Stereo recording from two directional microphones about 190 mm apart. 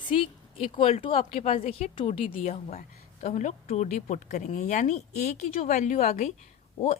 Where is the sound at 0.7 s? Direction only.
30° left (ahead or behind).